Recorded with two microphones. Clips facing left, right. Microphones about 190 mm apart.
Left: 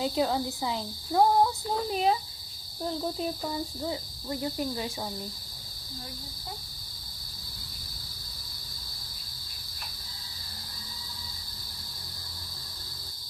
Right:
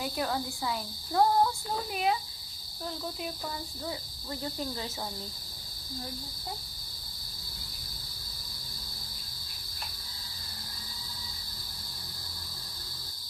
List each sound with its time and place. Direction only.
0.0 s a woman's voice: 20° left (ahead or behind)
1.9 s speech: 30° left (ahead or behind)
3.8 s a woman's voice: 20° left (ahead or behind)